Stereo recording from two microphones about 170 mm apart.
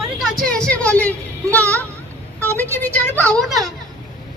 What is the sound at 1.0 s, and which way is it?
Child singing, 10° left (ahead or behind).